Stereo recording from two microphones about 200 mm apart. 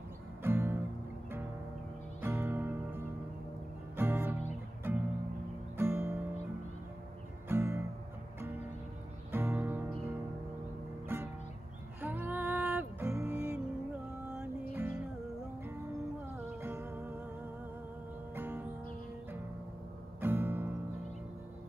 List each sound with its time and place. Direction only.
0.4 s music: 10° right (ahead or behind)
2.2 s music: 10° right (ahead or behind)
7.4 s music: 10° right (ahead or behind)
9.3 s music: 10° right (ahead or behind)
12.0 s music: 10° right (ahead or behind)
16.6 s music: 10° right (ahead or behind)
18.3 s music: 10° right (ahead or behind)
20.2 s music: 10° right (ahead or behind)